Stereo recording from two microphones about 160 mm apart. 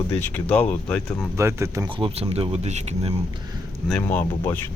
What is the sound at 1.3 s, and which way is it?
Speech, 15° right (ahead or behind).